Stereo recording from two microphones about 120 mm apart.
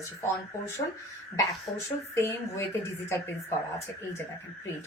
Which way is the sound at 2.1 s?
20° left (ahead or behind).